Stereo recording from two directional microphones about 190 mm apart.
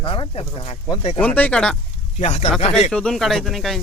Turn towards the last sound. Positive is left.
turn(degrees=0)  # may be behind; listen again after turning